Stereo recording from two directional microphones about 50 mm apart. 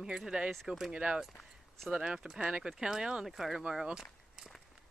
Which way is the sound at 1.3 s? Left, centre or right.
Centre.